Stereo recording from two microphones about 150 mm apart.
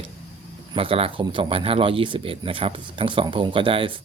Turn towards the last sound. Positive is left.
turn(degrees=-35)  # may be behind; listen again after turning